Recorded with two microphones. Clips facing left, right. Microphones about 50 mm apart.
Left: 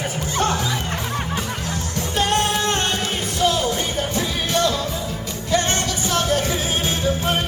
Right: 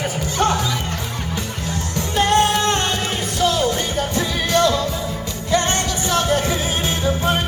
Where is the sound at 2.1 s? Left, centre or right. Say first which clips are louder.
Right 4 dB; right.